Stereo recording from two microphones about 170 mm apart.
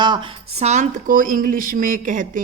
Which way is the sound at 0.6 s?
45° right (ahead or behind).